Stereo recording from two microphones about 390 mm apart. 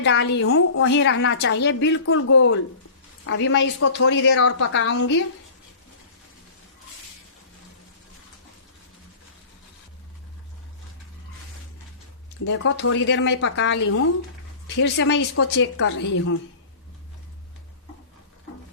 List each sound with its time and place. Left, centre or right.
0.0 s a woman's voice: left
12.5 s speech: left